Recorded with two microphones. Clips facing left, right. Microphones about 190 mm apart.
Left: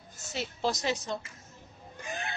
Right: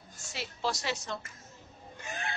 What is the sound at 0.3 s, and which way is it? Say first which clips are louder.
Speech: left 3 dB; 20° left (ahead or behind).